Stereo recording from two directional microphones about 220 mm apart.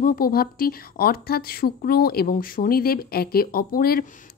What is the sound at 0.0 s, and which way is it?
A woman's voice, 40° left (ahead or behind).